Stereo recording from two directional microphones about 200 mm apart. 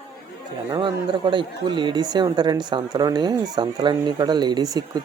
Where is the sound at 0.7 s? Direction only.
25° right (ahead or behind).